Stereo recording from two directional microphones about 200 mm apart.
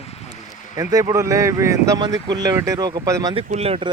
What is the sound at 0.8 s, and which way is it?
Speech, 20° right (ahead or behind).